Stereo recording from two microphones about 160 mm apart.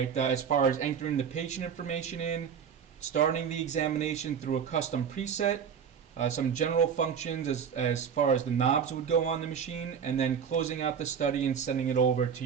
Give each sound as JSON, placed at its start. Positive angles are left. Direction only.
{"t": 0.1, "sound": "speech", "side_deg": 45}